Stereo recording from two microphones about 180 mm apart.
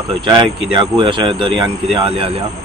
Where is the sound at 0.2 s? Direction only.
25° right (ahead or behind).